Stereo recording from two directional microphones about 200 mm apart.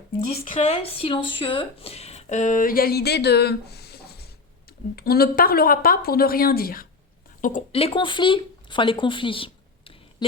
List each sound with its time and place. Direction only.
0.2 s speech: 35° left (ahead or behind)
7.7 s speech: 30° left (ahead or behind)